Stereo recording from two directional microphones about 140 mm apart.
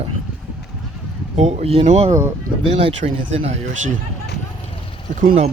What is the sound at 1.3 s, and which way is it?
Speech, 50° right (ahead or behind).